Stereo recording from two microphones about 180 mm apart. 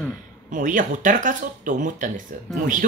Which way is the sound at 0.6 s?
45° right (ahead or behind).